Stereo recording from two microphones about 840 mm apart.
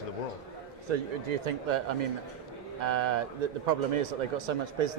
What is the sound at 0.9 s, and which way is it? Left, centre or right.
Speech, right.